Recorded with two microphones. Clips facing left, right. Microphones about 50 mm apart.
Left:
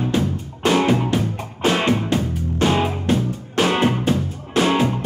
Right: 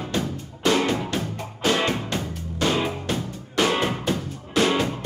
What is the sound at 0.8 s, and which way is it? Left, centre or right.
Music, left.